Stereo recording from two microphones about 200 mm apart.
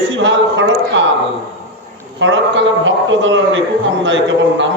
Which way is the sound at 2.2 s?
65° right (ahead or behind).